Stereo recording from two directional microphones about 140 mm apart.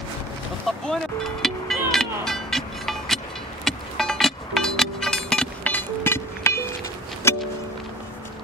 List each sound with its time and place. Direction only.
0.7 s music: centre (ahead or behind); by 7.4 s 20° left (ahead or behind)